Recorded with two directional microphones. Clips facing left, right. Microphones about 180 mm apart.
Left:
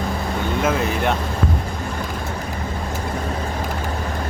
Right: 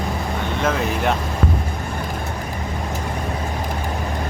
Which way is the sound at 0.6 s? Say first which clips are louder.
Right 1 dB; centre (ahead or behind).